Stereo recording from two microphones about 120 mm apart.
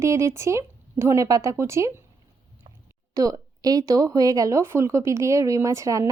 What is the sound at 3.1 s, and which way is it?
Speech, 30° right (ahead or behind).